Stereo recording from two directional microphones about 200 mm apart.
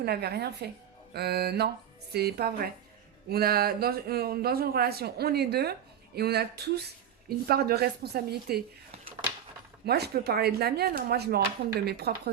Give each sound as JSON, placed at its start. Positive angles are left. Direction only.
{"t": 0.0, "sound": "speech", "side_deg": -50}
{"t": 9.8, "sound": "speech", "side_deg": -50}